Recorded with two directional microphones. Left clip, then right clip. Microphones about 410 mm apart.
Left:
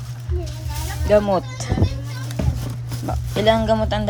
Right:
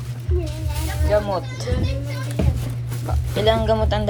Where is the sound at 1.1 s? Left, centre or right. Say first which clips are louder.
Left 4 dB; left.